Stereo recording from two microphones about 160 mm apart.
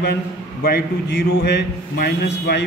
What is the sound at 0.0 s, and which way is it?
A man's voice, 90° left.